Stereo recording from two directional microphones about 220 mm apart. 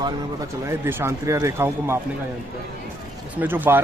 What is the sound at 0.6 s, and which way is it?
Speech, 10° right (ahead or behind).